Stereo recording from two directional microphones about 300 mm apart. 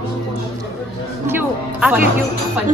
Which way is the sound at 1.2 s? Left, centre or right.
Centre.